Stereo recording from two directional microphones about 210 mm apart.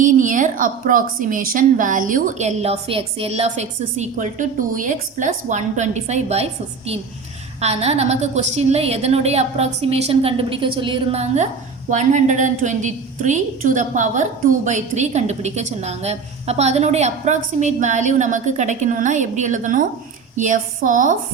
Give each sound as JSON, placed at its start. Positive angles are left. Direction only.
{"t": 0.0, "sound": "a woman's voice", "side_deg": -40}